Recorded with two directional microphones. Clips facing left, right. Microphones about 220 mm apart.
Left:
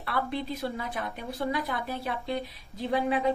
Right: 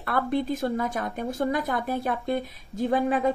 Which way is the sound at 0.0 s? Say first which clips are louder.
Right 6 dB; 50° right (ahead or behind).